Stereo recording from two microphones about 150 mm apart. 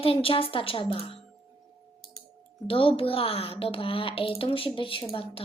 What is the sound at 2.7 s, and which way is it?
Speech, 35° left (ahead or behind).